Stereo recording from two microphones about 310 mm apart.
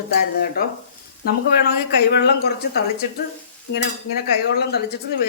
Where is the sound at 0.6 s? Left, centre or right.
Left.